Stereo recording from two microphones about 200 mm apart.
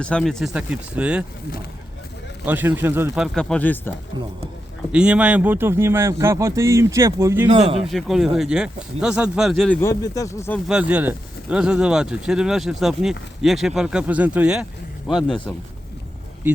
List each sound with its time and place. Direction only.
0.0 s speech: 5° left (ahead or behind)
2.5 s speech: 10° right (ahead or behind)
3.3 s speech: 5° left (ahead or behind)
4.9 s speech: 5° right (ahead or behind)
7.6 s speech: 30° right (ahead or behind)
7.9 s speech: centre (ahead or behind)
9.8 s speech: 15° left (ahead or behind)
10.7 s speech: 5° right (ahead or behind)